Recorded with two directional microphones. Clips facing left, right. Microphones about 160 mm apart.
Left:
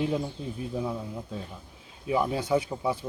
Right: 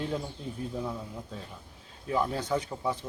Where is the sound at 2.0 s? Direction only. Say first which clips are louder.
Left 3 dB; 10° left (ahead or behind).